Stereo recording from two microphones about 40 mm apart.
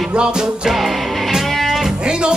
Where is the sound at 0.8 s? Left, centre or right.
Centre.